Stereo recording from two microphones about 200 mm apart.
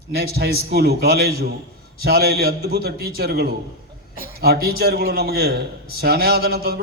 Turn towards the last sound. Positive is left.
turn(degrees=-50)  # may be behind; listen again after turning